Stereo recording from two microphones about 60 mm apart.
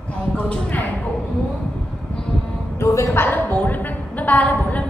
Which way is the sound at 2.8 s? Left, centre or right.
Left.